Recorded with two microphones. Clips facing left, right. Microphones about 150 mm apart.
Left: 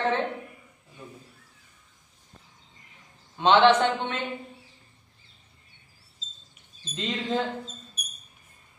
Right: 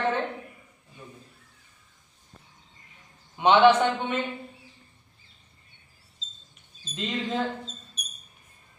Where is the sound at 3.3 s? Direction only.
15° right (ahead or behind).